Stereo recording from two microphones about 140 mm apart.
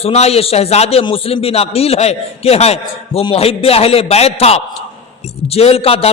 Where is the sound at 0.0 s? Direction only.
50° left (ahead or behind).